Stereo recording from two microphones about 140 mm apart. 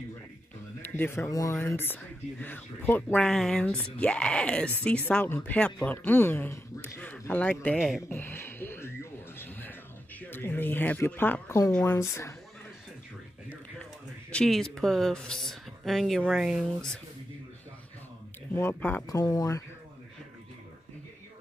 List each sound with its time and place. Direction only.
0.9 s speech: 15° left (ahead or behind)
8.1 s a sound: 15° left (ahead or behind)
10.3 s speech: 15° left (ahead or behind)
14.3 s a woman's voice: 5° left (ahead or behind)
18.5 s speech: 15° left (ahead or behind)
19.0 s speech: 25° left (ahead or behind)